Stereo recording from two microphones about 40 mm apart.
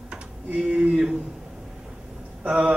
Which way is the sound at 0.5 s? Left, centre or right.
Right.